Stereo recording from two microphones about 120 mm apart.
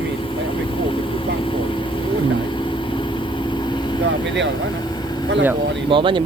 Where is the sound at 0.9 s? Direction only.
45° left (ahead or behind).